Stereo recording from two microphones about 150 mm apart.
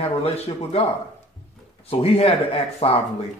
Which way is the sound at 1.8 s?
40° left (ahead or behind).